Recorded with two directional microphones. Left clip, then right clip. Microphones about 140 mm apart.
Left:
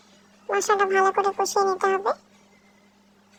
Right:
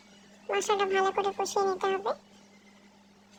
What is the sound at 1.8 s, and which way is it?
Speech, 30° left (ahead or behind).